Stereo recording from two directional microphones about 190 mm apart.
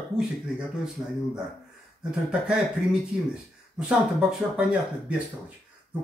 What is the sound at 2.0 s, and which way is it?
Speech, 5° right (ahead or behind).